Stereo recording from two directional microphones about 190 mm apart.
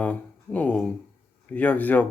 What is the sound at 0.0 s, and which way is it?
A man's voice, 10° left (ahead or behind).